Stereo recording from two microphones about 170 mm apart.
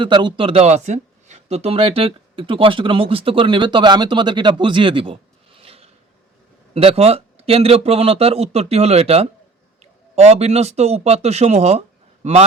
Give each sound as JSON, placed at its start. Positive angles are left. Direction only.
{"t": 0.0, "sound": "a man's voice", "side_deg": -25}